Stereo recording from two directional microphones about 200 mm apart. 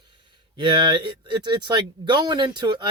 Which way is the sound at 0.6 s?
20° right (ahead or behind).